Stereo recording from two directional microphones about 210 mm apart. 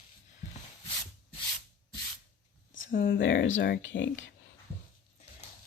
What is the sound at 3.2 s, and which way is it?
Speech, 65° left (ahead or behind).